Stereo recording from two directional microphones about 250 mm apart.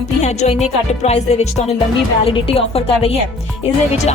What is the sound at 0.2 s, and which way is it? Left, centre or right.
Speech, left.